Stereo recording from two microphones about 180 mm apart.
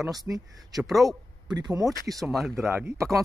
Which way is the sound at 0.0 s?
Centre (ahead or behind).